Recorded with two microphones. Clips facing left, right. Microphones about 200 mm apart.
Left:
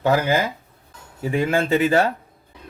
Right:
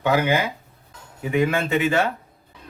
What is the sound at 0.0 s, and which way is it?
Speech, 40° left (ahead or behind).